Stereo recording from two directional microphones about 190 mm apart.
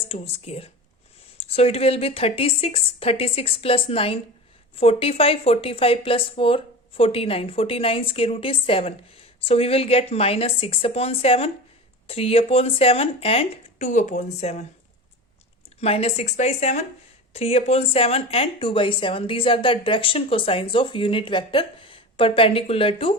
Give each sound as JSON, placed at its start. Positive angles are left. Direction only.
{"t": 0.1, "sound": "a woman's voice", "side_deg": 30}
{"t": 15.8, "sound": "a woman's voice", "side_deg": 30}